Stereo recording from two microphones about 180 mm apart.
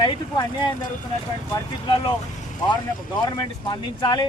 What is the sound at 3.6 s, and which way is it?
Speech, 25° left (ahead or behind).